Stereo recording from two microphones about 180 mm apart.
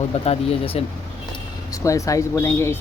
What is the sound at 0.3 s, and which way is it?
Speech, 30° left (ahead or behind).